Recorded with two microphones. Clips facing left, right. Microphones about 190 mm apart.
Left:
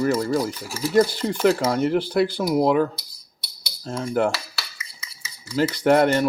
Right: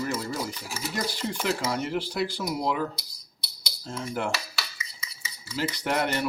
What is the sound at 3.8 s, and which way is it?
Cutlery, 50° left (ahead or behind).